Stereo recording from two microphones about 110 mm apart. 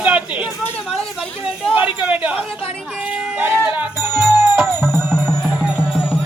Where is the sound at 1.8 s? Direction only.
10° right (ahead or behind).